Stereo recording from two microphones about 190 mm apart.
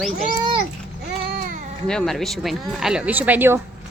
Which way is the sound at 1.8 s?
5° left (ahead or behind).